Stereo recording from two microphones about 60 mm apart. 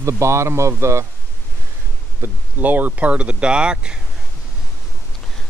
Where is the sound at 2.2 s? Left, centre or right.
Right; by 3.9 s centre.